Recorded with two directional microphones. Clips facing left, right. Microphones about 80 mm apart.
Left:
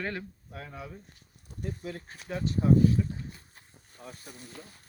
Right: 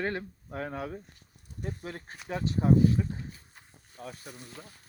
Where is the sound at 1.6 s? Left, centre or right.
Right.